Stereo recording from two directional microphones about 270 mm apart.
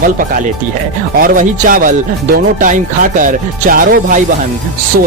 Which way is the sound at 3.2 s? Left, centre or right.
Right.